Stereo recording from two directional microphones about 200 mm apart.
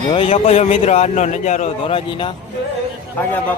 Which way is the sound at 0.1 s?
30° left (ahead or behind).